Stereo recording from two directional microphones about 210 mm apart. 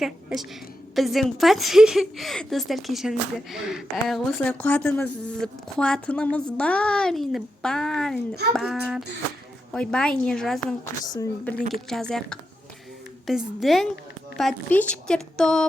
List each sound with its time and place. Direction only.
0.3 s a woman's voice: 5° right (ahead or behind)
11.0 s a woman's voice: 20° left (ahead or behind)
11.7 s a woman's voice: centre (ahead or behind)